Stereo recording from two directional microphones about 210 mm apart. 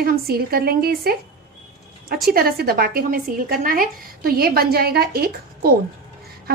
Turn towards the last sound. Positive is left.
turn(degrees=-45)  # may be behind; listen again after turning